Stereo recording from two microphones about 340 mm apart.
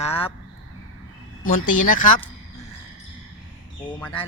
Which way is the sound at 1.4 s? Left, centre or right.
Left.